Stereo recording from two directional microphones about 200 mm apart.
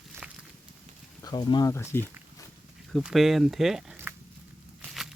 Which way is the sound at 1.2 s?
20° left (ahead or behind).